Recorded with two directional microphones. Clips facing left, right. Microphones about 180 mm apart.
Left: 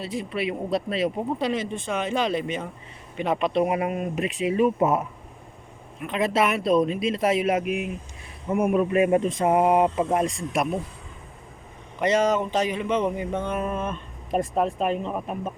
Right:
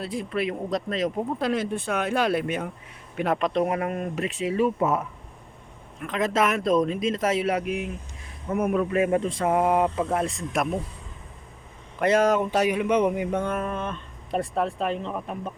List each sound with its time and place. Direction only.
0.0 s speech: centre (ahead or behind)
10.5 s speech: 5° left (ahead or behind)
11.9 s speech: 5° right (ahead or behind)
13.5 s speech: 15° left (ahead or behind)